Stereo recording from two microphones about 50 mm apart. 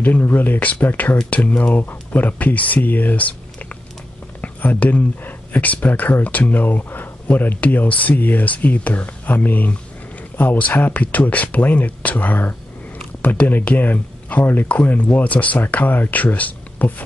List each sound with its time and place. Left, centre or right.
0.0 s speech: left
14.7 s speech: left